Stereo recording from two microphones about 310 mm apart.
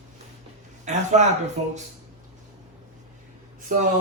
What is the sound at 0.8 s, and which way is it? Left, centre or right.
Speech, right.